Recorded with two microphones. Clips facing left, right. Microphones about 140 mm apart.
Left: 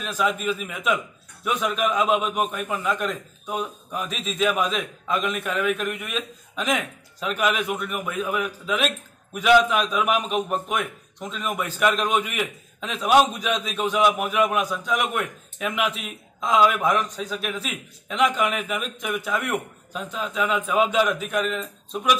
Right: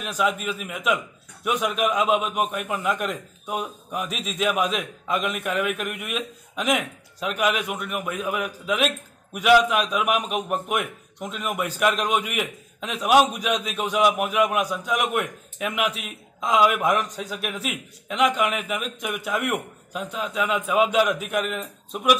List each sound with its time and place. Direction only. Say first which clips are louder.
0.0 s a man's voice: even; 5° right (ahead or behind)